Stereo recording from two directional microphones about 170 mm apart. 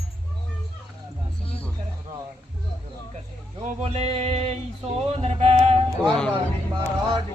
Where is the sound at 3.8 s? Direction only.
40° right (ahead or behind).